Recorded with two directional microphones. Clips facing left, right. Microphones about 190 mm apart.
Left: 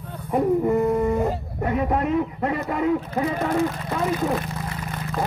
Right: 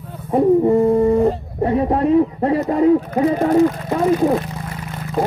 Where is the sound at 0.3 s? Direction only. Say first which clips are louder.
Right 6 dB; 30° right (ahead or behind).